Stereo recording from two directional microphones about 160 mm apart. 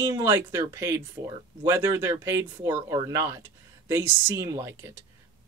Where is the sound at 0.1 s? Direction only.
15° right (ahead or behind).